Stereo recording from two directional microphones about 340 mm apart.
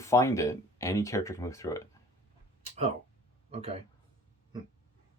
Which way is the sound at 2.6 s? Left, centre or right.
Centre.